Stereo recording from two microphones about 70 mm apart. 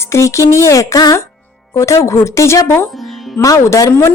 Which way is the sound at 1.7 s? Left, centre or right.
Left.